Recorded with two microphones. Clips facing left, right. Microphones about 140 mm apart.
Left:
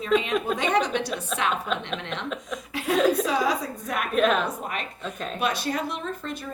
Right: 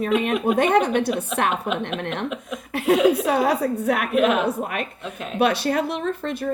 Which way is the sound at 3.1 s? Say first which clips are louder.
Right 4 dB; 60° right (ahead or behind).